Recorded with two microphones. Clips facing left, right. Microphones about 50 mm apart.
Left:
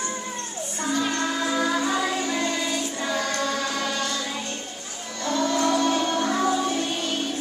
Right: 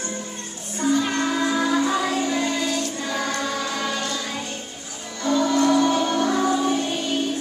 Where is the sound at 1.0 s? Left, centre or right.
Centre.